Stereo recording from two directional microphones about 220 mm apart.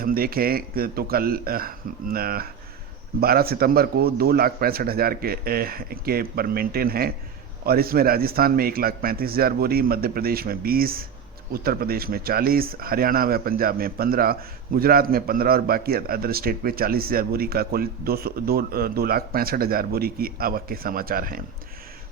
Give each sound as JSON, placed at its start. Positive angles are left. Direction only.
{"t": 0.0, "sound": "a man's voice", "side_deg": -40}